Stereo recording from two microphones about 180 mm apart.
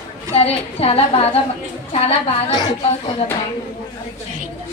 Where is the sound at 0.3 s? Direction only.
35° left (ahead or behind).